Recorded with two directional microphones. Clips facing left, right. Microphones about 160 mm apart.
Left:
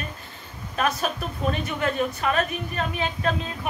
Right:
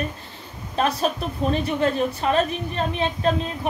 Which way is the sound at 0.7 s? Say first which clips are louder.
Right 3 dB; 30° right (ahead or behind).